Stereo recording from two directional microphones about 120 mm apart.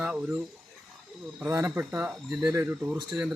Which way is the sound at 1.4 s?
25° right (ahead or behind).